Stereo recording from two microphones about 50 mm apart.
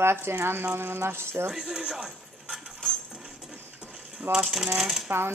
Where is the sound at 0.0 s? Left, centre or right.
Right.